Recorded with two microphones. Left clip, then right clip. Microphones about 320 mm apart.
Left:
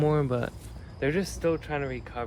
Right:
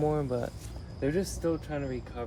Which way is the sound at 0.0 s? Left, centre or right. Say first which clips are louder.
Left 3 dB; left.